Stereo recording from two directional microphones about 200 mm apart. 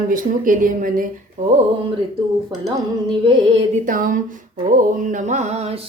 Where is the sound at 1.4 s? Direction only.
40° right (ahead or behind).